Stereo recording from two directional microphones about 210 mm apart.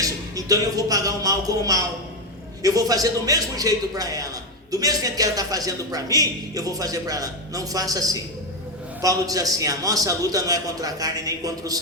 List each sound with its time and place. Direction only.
0.0 s a man's voice: 15° right (ahead or behind)